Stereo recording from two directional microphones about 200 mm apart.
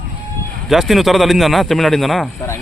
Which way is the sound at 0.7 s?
Centre (ahead or behind).